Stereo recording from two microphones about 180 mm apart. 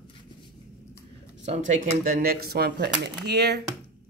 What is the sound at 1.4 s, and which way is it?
Speech, 45° right (ahead or behind).